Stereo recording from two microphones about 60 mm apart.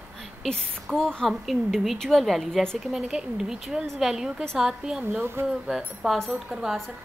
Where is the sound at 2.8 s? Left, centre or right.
Centre.